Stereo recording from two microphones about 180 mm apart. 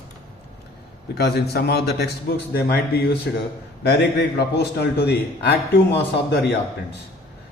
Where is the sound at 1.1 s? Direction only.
65° left (ahead or behind).